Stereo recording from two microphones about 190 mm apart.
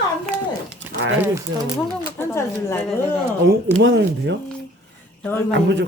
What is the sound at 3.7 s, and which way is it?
Speech, 75° right (ahead or behind).